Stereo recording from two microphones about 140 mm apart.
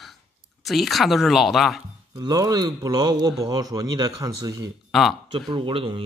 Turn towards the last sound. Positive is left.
turn(degrees=-35)  # may be behind; listen again after turning